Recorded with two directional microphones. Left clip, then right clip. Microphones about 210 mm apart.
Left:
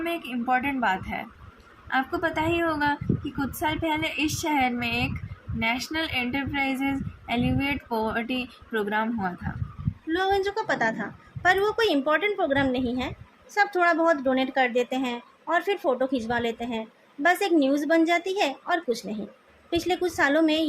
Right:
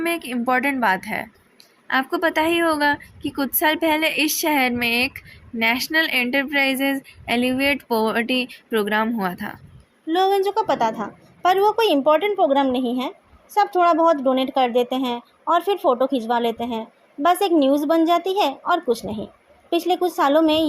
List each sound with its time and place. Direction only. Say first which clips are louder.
0.0 s speech: right 6 dB; 50° right (ahead or behind)
10.1 s a woman's voice: right 6 dB; 35° right (ahead or behind)